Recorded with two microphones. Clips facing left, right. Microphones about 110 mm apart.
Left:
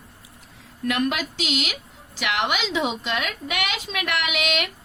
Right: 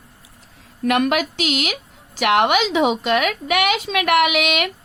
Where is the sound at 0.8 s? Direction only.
65° right (ahead or behind).